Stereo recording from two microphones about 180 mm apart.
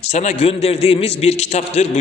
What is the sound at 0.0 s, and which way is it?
A man's voice, 40° left (ahead or behind).